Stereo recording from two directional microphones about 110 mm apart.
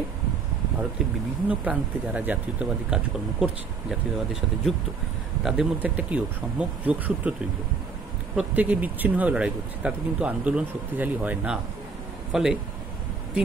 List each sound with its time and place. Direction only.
1.5 s speech: 10° right (ahead or behind)
8.4 s speech: 15° right (ahead or behind)